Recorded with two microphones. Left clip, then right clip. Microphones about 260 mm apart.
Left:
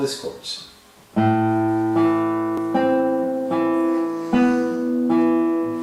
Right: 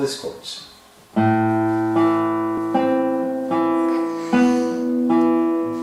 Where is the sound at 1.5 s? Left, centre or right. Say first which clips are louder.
Right 1 dB; centre.